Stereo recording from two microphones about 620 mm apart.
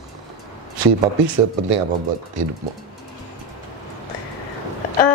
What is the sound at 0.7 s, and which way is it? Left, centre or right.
A man's voice, right.